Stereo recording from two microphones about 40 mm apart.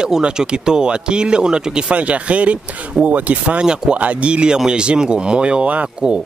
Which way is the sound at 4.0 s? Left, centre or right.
Right.